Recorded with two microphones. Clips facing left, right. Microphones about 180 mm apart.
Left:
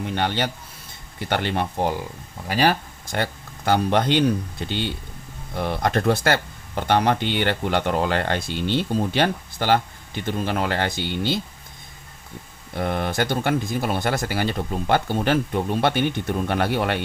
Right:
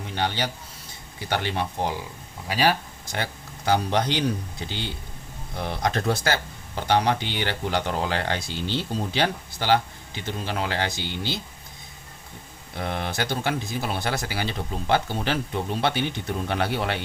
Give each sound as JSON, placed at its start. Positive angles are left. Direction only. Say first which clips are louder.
{"t": 0.1, "sound": "speech", "louder": "left 1 dB", "side_deg": 55}
{"t": 5.5, "sound": "speech", "louder": "left 4 dB", "side_deg": 55}
{"t": 12.7, "sound": "speech", "louder": "left 5 dB", "side_deg": 50}